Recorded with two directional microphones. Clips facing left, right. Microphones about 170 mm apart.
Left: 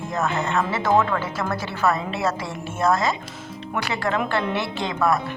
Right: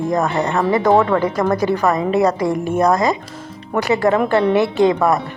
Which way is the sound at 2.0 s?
50° right (ahead or behind).